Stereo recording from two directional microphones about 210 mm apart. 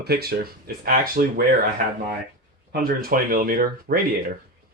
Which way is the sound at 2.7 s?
45° right (ahead or behind).